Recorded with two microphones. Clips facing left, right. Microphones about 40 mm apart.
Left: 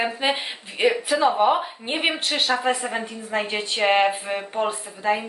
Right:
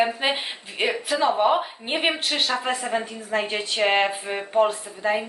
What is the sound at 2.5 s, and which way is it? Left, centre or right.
Speech, centre.